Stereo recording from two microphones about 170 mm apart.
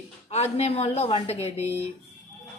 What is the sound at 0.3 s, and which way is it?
A woman's voice, 40° left (ahead or behind).